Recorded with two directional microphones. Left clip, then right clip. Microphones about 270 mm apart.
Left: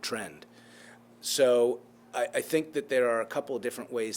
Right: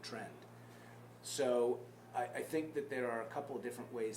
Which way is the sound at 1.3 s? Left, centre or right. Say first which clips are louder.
Left 11 dB; left.